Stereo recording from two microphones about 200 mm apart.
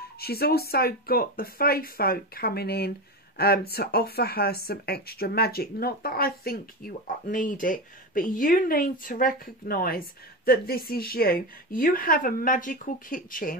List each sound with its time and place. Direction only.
0.2 s speech: 50° left (ahead or behind)